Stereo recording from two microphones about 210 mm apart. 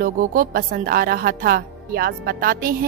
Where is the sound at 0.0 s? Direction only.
40° right (ahead or behind).